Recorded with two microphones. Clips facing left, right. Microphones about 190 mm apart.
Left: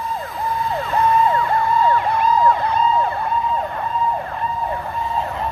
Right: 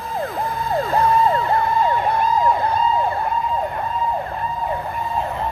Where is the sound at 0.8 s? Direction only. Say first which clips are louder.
Right 1 dB; 40° right (ahead or behind).